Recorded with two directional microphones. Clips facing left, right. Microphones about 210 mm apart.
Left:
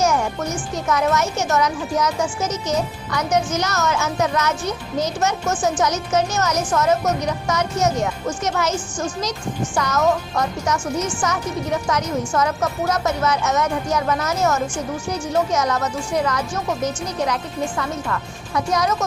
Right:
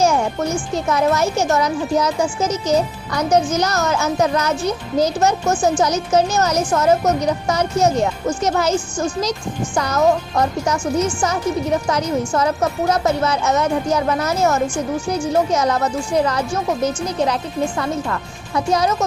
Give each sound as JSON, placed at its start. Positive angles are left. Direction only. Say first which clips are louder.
{"t": 0.9, "sound": "speech", "louder": "right 2 dB", "side_deg": -30}
{"t": 9.7, "sound": "speech", "louder": "right 3 dB", "side_deg": -30}
{"t": 11.9, "sound": "speech", "louder": "right 3 dB", "side_deg": -30}